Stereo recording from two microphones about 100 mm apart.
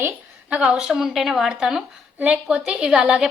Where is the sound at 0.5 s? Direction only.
10° right (ahead or behind).